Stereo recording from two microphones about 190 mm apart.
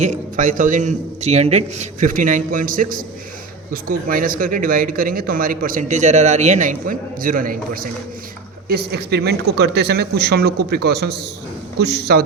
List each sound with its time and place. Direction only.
0.0 s speech: 40° right (ahead or behind); by 12.2 s 60° right (ahead or behind)